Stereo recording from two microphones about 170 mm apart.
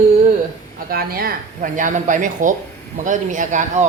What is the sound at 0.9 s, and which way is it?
A woman's voice, 60° right (ahead or behind).